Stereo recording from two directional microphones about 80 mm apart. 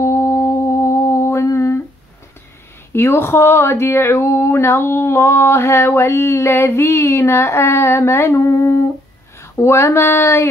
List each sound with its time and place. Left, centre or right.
0.0 s humming: left
2.9 s speech: left